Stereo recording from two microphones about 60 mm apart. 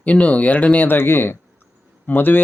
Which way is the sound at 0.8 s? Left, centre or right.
Left.